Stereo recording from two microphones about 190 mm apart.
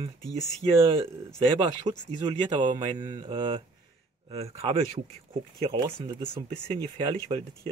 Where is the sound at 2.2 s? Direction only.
25° right (ahead or behind).